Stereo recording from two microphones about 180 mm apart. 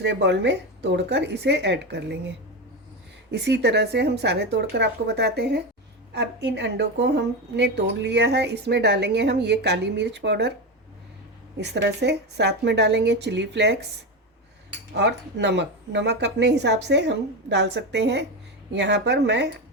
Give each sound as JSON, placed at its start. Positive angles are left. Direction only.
{"t": 0.0, "sound": "a woman's voice", "side_deg": -75}
{"t": 3.3, "sound": "a woman's voice", "side_deg": -70}
{"t": 11.6, "sound": "a woman's voice", "side_deg": -70}
{"t": 14.9, "sound": "a woman's voice", "side_deg": -70}